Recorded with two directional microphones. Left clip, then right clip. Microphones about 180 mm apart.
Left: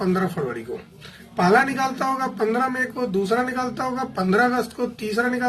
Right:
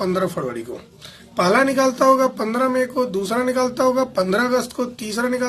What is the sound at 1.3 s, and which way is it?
Speech, 45° right (ahead or behind).